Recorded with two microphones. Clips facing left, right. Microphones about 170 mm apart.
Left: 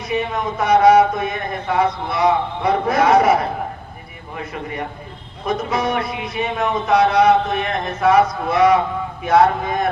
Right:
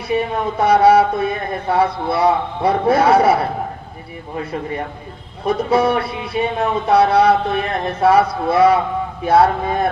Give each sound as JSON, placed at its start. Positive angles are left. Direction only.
{"t": 0.1, "sound": "speech", "side_deg": -30}
{"t": 5.5, "sound": "speech", "side_deg": -30}